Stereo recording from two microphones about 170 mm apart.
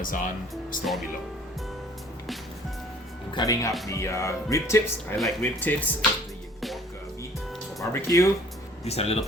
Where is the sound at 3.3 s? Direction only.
20° left (ahead or behind).